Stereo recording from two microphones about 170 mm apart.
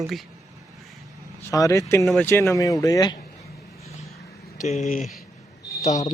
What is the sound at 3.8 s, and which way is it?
Vehicle, 40° left (ahead or behind).